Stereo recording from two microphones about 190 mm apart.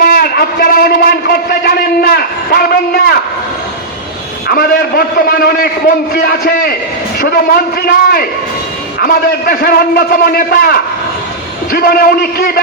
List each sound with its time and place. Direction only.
0.0 s a man's voice: 50° left (ahead or behind)
4.4 s a man's voice: 50° left (ahead or behind)